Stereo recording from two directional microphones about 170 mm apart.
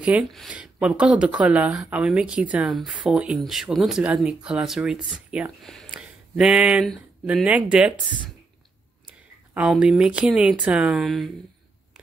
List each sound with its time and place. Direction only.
0.0 s speech: 5° right (ahead or behind)
9.5 s speech: 5° right (ahead or behind)